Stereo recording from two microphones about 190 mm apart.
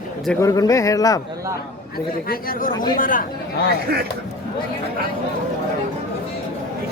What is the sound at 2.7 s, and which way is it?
Speech, 20° left (ahead or behind).